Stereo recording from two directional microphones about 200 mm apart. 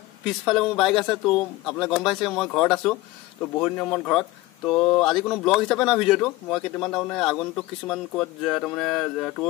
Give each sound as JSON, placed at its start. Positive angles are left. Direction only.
{"t": 0.5, "sound": "speech", "side_deg": 0}